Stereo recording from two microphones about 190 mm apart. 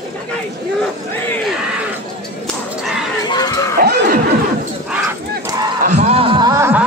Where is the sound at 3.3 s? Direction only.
20° left (ahead or behind).